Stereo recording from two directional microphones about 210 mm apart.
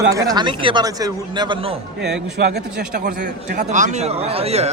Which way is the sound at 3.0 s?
35° right (ahead or behind).